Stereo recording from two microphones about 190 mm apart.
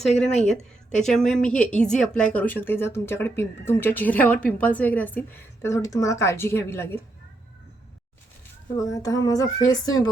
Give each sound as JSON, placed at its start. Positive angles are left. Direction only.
{"t": 0.3, "sound": "speech", "side_deg": 0}
{"t": 8.8, "sound": "speech", "side_deg": 20}